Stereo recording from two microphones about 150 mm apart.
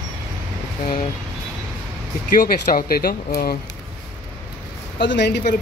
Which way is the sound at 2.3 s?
70° left (ahead or behind).